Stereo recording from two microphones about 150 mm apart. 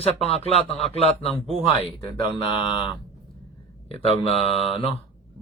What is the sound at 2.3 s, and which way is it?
Mantra, 30° left (ahead or behind).